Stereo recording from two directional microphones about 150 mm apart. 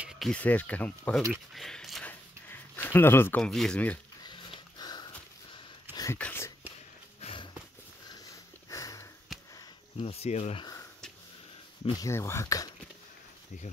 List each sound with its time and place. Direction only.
0.0 s a sound: 5° right (ahead or behind)
0.3 s speech: 10° left (ahead or behind)
2.5 s speech: 15° left (ahead or behind)
4.2 s sniff: 30° left (ahead or behind)
6.1 s speech: 10° left (ahead or behind)
7.2 s a sound: 40° left (ahead or behind)
8.6 s sniff: 20° left (ahead or behind)
9.3 s sniff: centre (ahead or behind)
9.9 s speech: 40° left (ahead or behind)
12.0 s speech: 20° left (ahead or behind)